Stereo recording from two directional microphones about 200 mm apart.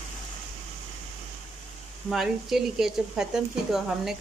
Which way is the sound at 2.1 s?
Centre (ahead or behind).